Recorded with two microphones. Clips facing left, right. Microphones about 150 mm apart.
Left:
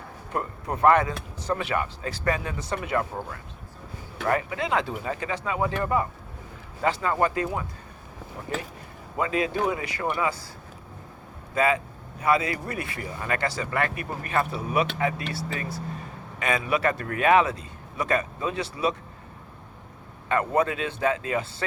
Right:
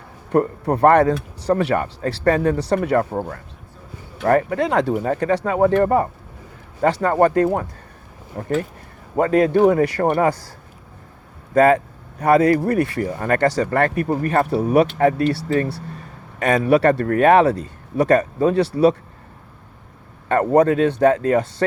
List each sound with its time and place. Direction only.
0.3 s a man's voice: 35° right (ahead or behind)
2.0 s a man's voice: 35° right (ahead or behind)
11.5 s a man's voice: 55° right (ahead or behind)
16.4 s a man's voice: 40° right (ahead or behind)
20.2 s speech: 40° right (ahead or behind)